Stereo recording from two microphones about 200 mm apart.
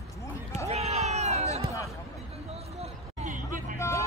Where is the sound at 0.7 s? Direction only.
30° right (ahead or behind).